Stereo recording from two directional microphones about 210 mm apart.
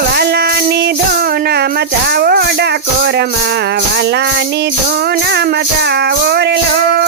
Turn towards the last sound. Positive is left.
turn(degrees=-50)  # may be behind; listen again after turning